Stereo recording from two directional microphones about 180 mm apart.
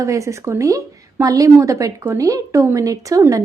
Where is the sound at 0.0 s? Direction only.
15° right (ahead or behind).